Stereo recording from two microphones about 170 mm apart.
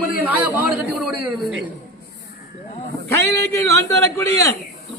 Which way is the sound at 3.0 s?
15° left (ahead or behind).